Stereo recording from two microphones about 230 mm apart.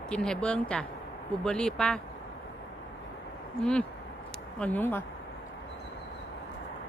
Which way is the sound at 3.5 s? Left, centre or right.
Centre.